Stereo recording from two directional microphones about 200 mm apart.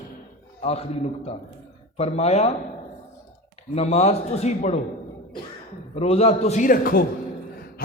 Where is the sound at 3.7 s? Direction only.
30° left (ahead or behind).